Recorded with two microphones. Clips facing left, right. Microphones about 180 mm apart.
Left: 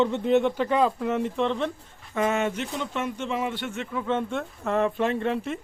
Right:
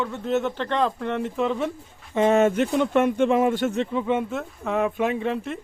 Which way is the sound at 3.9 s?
20° right (ahead or behind).